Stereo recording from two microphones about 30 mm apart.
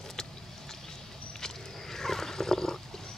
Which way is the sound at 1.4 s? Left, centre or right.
Centre.